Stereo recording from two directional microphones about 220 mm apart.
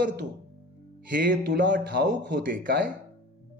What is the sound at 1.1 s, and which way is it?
A man's voice, 40° right (ahead or behind).